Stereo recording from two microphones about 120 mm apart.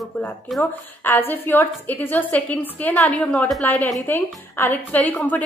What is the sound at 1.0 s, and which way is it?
A woman's voice, 15° left (ahead or behind).